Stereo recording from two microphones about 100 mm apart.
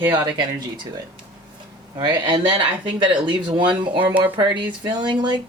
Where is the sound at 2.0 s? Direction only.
45° right (ahead or behind).